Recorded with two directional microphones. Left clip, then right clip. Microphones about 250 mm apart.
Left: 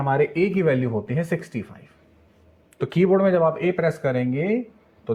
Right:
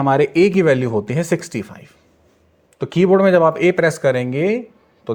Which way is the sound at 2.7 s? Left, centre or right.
Centre.